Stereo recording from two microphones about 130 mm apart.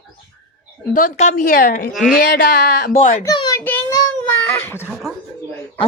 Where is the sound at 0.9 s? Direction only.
80° left.